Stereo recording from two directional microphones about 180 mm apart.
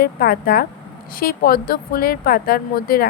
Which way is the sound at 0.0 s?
55° left (ahead or behind).